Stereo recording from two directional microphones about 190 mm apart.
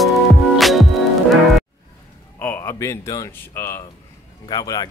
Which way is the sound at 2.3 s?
10° left (ahead or behind).